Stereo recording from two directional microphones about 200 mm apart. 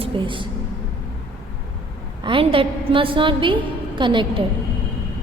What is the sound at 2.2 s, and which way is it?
A woman's voice, 25° right (ahead or behind).